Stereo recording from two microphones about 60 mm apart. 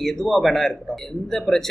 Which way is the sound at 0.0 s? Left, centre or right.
Centre.